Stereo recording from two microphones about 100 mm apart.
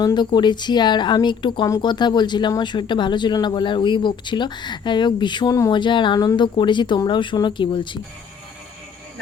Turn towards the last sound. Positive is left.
turn(degrees=55)  # may be behind; listen again after turning